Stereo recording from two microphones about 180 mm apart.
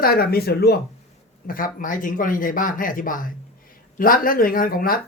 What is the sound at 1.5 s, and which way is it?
Speech, 50° left (ahead or behind).